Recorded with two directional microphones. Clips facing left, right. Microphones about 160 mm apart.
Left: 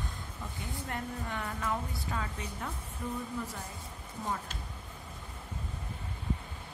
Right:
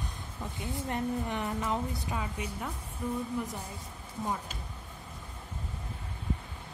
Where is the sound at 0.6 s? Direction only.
20° right (ahead or behind).